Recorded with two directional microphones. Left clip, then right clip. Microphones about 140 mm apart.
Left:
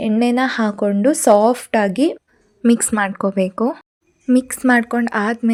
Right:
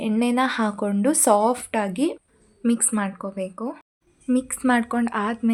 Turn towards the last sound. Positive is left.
turn(degrees=30)  # may be behind; listen again after turning